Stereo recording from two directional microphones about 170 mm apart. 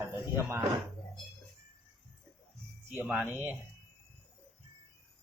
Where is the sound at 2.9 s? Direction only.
10° right (ahead or behind).